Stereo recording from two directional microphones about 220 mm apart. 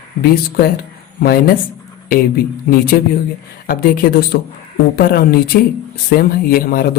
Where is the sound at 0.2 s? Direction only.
45° left (ahead or behind).